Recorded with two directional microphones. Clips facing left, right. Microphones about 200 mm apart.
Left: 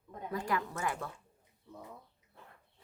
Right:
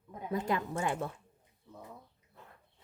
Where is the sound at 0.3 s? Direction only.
20° right (ahead or behind).